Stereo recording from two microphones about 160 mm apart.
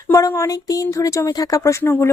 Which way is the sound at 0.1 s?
20° left (ahead or behind).